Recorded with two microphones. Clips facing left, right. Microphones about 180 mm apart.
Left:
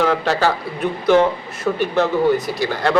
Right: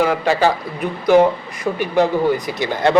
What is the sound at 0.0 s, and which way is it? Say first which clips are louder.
A man's voice: right 1 dB; 10° right (ahead or behind).